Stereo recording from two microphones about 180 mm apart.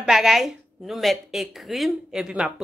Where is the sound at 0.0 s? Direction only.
Centre (ahead or behind).